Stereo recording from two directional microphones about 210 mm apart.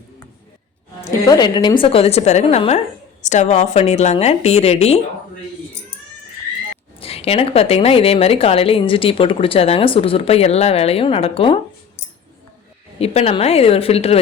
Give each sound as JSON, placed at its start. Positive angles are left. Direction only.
{"t": 1.3, "sound": "a woman's voice", "side_deg": 20}
{"t": 7.0, "sound": "a woman's voice", "side_deg": 30}
{"t": 13.0, "sound": "a woman's voice", "side_deg": 30}